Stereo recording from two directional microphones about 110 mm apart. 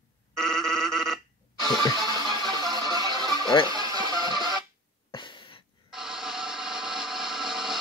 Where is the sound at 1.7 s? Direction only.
40° left (ahead or behind).